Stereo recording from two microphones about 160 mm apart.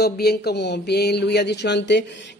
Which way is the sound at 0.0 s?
85° left.